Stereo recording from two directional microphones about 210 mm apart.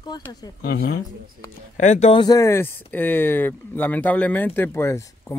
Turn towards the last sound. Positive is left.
turn(degrees=10)  # may be behind; listen again after turning